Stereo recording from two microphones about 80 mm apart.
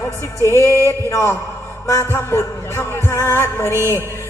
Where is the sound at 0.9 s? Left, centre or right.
Left.